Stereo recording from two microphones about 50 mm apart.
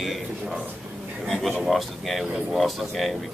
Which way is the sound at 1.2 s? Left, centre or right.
Centre.